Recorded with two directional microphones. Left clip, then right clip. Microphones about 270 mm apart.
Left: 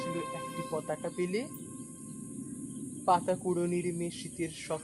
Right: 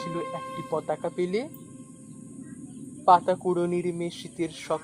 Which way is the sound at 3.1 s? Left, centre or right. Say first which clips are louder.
Right 8 dB; right.